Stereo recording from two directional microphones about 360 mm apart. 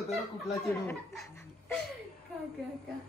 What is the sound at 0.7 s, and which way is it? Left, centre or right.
Speech, centre.